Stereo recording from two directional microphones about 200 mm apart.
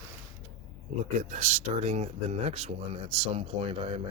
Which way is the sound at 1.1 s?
40° right (ahead or behind).